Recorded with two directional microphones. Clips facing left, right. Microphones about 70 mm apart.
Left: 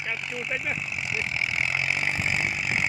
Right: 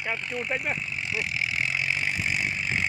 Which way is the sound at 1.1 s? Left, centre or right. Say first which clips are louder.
Even; left.